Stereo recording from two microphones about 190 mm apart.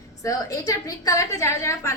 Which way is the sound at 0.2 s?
15° left (ahead or behind).